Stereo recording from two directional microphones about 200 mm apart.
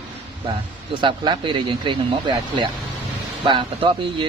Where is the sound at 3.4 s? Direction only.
25° right (ahead or behind).